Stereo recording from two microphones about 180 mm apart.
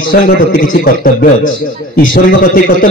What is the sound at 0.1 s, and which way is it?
A man's voice, 55° left (ahead or behind).